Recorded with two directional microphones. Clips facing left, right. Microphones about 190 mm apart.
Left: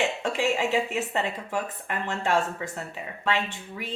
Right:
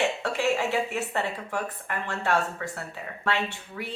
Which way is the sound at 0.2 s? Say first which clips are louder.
Even; 15° left (ahead or behind).